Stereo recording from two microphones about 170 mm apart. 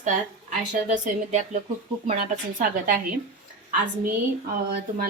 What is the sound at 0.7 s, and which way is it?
Speech, 45° right (ahead or behind).